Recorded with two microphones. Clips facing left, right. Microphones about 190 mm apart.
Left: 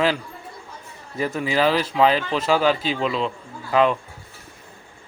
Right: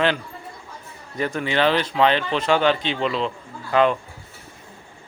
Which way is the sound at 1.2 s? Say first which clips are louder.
Even; 5° left (ahead or behind).